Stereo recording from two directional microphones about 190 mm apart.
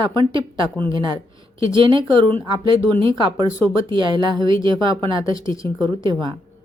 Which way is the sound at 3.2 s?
25° right (ahead or behind).